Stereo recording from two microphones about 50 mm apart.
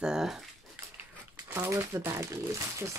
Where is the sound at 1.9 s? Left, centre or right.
Right.